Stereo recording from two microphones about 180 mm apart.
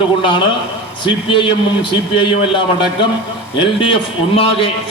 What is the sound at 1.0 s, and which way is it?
A man's voice, 25° left (ahead or behind).